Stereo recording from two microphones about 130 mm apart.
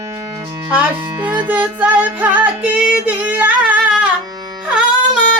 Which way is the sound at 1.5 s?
15° right (ahead or behind).